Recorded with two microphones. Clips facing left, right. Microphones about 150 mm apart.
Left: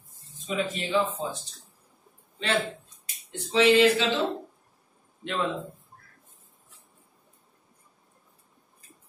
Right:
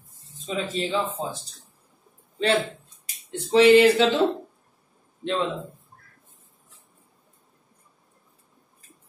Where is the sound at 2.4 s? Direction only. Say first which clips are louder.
Right 5 dB; 40° right (ahead or behind).